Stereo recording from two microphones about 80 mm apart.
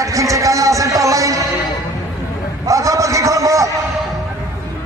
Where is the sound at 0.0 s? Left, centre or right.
Right.